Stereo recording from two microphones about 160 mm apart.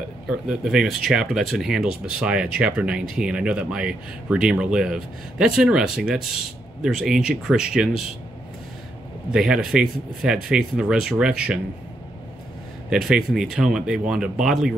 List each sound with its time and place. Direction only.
0.3 s speech: 5° right (ahead or behind)
9.3 s speech: 5° right (ahead or behind)
12.9 s speech: 5° right (ahead or behind)